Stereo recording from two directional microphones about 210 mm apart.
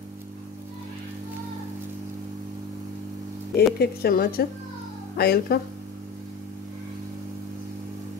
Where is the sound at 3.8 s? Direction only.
45° left (ahead or behind).